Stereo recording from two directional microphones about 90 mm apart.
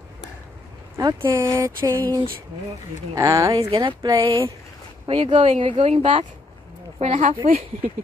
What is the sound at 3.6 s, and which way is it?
Speech, 65° right (ahead or behind).